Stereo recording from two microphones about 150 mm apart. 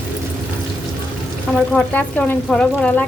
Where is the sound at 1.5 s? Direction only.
5° left (ahead or behind).